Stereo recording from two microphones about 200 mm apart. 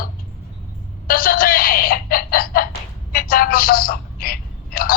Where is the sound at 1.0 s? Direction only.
45° left (ahead or behind).